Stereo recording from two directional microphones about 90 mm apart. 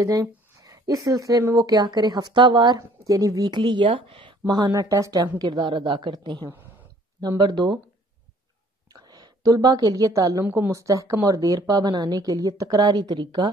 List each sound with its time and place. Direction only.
0.0 s speech: 40° right (ahead or behind); by 2.8 s 60° right (ahead or behind)
3.1 s speech: 40° right (ahead or behind); by 4.4 s 70° right (ahead or behind)
4.5 s speech: 50° right (ahead or behind)
5.7 s speech: 65° right (ahead or behind)
8.9 s a woman's voice: 50° right (ahead or behind)